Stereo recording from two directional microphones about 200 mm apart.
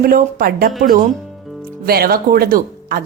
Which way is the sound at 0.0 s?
45° right (ahead or behind).